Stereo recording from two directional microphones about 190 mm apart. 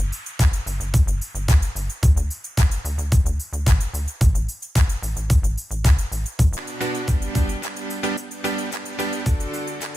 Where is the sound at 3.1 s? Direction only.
Centre (ahead or behind).